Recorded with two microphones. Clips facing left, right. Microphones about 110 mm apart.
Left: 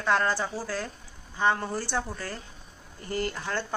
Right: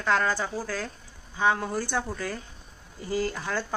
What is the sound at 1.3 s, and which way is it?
Speech, 5° right (ahead or behind).